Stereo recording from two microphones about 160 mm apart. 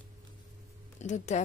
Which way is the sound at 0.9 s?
45° left (ahead or behind).